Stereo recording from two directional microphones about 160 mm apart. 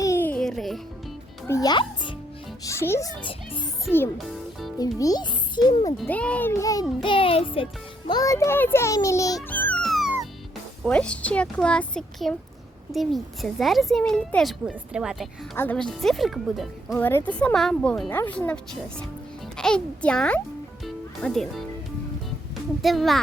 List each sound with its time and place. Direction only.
0.0 s music: 15° left (ahead or behind)
1.5 s a child's voice: 20° left (ahead or behind)
2.6 s speech: 15° left (ahead or behind)
3.2 s a child's voice: 30° left (ahead or behind)
3.9 s a child's voice: centre (ahead or behind)
4.8 s a child's voice: 25° left (ahead or behind)
6.1 s speech: 10° left (ahead or behind)
7.0 s a child's voice: 35° left (ahead or behind)
9.5 s music: 10° left (ahead or behind)
10.8 s a child's voice: 5° left (ahead or behind)
15.5 s a child's voice: 10° left (ahead or behind)
17.0 s a child's voice: 15° left (ahead or behind)
22.8 s a child's voice: centre (ahead or behind)